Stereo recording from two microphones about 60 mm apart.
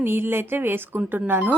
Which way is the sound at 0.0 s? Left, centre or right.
Right.